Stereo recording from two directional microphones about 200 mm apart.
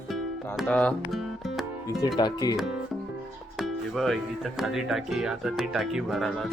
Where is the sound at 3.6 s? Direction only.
Centre (ahead or behind).